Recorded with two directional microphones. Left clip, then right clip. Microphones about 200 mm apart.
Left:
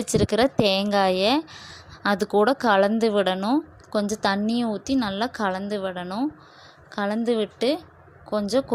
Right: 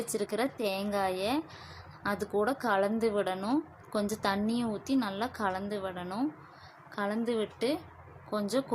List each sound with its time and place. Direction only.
0.1 s a woman's voice: 35° left (ahead or behind)